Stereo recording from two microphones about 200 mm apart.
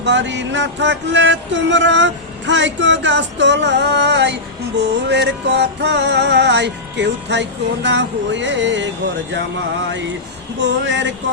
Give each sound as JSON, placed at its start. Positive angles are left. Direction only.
{"t": 0.0, "sound": "music", "side_deg": -65}
{"t": 10.6, "sound": "music", "side_deg": -60}